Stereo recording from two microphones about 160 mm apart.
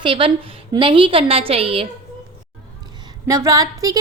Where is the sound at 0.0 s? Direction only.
35° right (ahead or behind).